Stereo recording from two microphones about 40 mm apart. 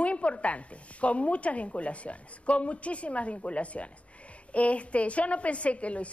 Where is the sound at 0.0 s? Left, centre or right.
Left.